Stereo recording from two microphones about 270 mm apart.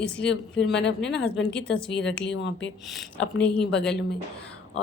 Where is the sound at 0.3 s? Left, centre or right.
Left.